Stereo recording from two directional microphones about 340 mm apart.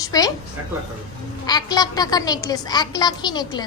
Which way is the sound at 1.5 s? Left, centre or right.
Centre.